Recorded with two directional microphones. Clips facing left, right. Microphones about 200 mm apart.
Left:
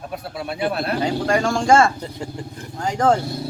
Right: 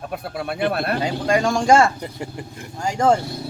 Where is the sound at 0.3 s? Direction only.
50° right (ahead or behind).